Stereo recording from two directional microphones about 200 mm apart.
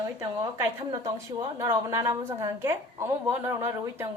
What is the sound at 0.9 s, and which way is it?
A woman's voice, 15° right (ahead or behind).